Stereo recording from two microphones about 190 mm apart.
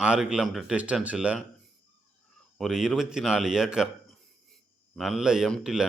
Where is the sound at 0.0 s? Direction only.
5° right (ahead or behind).